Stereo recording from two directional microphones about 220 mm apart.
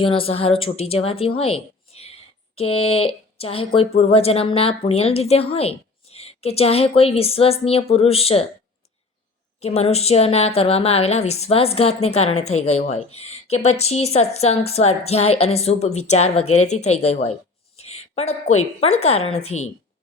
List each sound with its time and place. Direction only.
0.0 s a woman's voice: 25° left (ahead or behind)
1.4 s a sound: 25° left (ahead or behind)
2.6 s a woman's voice: 25° left (ahead or behind)
9.6 s a woman's voice: 30° left (ahead or behind)